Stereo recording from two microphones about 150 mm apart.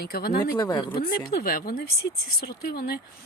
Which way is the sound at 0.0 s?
90° left.